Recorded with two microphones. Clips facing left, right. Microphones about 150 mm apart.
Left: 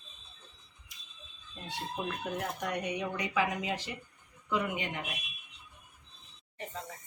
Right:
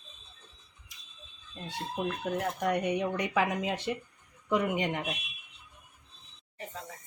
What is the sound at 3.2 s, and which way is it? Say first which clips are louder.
A woman's voice: right 3 dB; 55° right (ahead or behind).